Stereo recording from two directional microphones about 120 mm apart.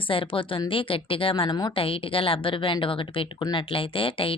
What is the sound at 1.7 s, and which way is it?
Speech, 50° left (ahead or behind).